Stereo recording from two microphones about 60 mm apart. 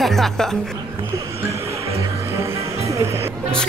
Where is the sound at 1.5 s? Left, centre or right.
Right.